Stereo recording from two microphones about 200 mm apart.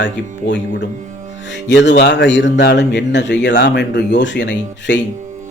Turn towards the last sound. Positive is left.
turn(degrees=60)  # may be behind; listen again after turning